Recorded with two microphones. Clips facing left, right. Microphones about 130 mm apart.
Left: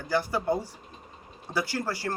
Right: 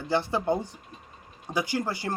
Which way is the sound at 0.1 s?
25° right (ahead or behind).